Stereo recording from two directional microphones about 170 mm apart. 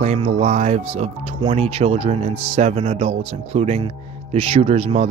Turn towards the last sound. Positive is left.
turn(degrees=-35)  # may be behind; listen again after turning